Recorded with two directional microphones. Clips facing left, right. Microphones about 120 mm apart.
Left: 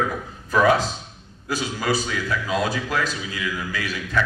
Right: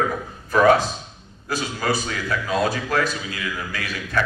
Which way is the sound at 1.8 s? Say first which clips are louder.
Even; 45° right (ahead or behind).